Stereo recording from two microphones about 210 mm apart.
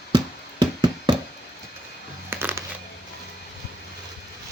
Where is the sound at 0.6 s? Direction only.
20° right (ahead or behind).